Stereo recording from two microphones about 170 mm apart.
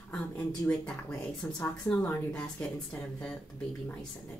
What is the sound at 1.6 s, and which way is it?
Speech, 15° left (ahead or behind).